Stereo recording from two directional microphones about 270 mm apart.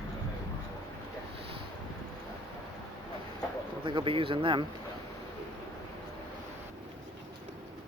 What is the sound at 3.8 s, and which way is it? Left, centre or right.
Speech, centre.